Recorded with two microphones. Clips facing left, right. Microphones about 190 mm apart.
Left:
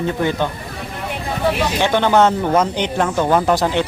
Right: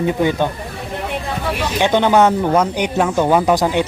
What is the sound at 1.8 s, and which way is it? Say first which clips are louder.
Speech: right 2 dB; 15° right (ahead or behind).